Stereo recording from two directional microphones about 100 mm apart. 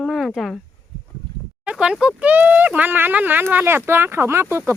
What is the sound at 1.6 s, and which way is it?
Speech, 10° right (ahead or behind).